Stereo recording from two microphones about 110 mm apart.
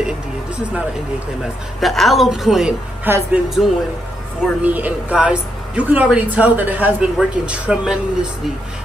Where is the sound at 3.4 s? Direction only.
Centre (ahead or behind).